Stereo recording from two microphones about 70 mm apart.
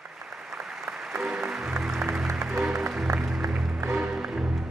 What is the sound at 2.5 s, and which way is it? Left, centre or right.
Music, centre.